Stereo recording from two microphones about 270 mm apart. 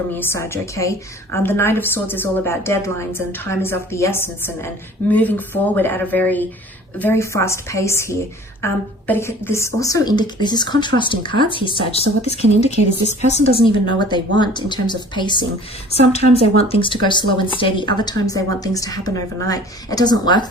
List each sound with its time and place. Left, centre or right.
0.1 s a woman's voice: centre
16.4 s a woman's voice: left